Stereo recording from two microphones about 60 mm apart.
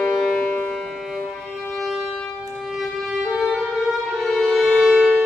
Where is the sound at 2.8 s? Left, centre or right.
Centre.